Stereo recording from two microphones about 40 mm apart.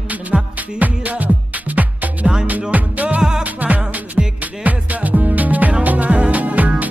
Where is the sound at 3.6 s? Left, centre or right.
Right.